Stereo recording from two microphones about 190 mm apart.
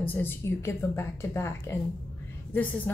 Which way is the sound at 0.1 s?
10° left (ahead or behind).